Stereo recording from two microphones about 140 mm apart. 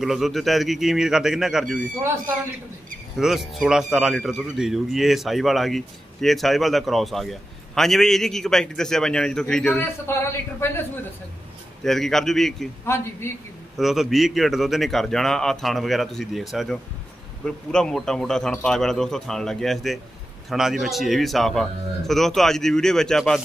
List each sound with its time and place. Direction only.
0.0 s a man's voice: centre (ahead or behind)
3.2 s a man's voice: centre (ahead or behind)
10.1 s a man's voice: 15° left (ahead or behind)
11.8 s a man's voice: centre (ahead or behind)
12.8 s a man's voice: 20° left (ahead or behind)
13.7 s a man's voice: centre (ahead or behind)